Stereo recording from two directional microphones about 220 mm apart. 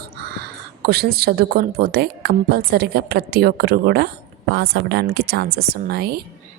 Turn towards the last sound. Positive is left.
turn(degrees=-45)  # may be behind; listen again after turning